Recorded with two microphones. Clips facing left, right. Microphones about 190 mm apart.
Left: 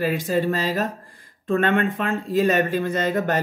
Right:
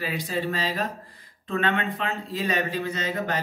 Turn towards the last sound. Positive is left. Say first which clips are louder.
# left 6 dB
turn(degrees=50)  # may be behind; listen again after turning